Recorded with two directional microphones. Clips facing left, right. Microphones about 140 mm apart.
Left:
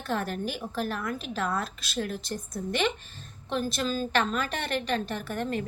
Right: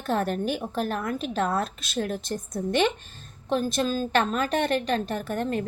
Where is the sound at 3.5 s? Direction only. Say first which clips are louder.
Right 4 dB; 45° right (ahead or behind).